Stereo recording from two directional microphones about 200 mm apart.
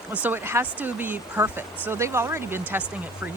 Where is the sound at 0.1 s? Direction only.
10° right (ahead or behind).